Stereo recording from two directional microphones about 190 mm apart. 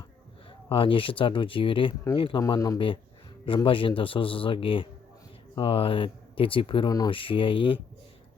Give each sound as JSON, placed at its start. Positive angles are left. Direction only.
{"t": 0.7, "sound": "speech", "side_deg": 30}